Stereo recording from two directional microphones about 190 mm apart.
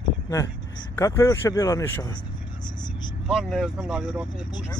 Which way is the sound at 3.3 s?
Centre (ahead or behind).